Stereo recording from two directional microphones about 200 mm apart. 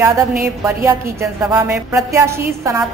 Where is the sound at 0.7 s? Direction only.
15° right (ahead or behind).